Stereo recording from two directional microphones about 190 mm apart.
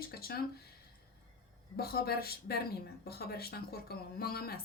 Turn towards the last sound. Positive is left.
turn(degrees=55)  # may be behind; listen again after turning